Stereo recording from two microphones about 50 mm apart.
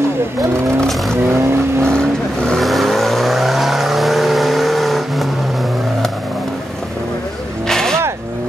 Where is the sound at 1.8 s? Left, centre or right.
Centre.